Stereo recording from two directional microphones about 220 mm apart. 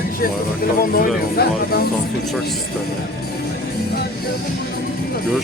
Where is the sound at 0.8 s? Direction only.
45° left (ahead or behind).